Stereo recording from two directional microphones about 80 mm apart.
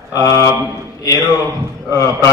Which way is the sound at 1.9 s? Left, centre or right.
Left.